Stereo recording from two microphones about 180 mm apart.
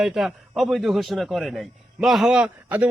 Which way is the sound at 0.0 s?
Centre (ahead or behind).